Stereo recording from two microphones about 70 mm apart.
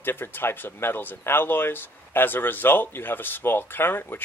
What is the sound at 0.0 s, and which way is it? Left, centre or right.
Speech, left.